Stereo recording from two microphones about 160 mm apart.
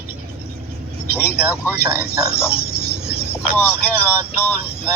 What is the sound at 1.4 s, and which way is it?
Speech, 10° right (ahead or behind).